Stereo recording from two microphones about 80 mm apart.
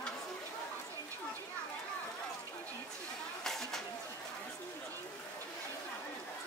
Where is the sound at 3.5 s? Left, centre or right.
Centre.